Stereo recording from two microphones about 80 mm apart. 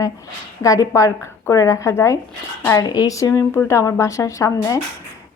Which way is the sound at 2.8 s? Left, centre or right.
Left.